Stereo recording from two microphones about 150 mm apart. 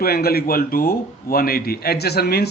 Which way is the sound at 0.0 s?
90° left.